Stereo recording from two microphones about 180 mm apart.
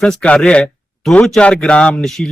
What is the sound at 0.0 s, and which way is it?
Speech, 5° left (ahead or behind).